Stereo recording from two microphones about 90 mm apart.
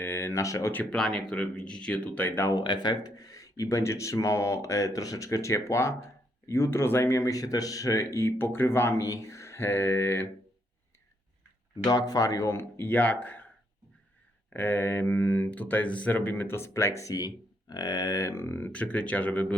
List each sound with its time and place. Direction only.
0.0 s speech: 30° left (ahead or behind)
0.7 s speech: 20° left (ahead or behind)
0.9 s speech: 5° left (ahead or behind)
2.5 s speech: 50° left (ahead or behind); by 10.2 s 25° left (ahead or behind)
11.9 s speech: 45° left (ahead or behind); by 13.5 s 15° left (ahead or behind)
14.5 s speech: 20° left (ahead or behind)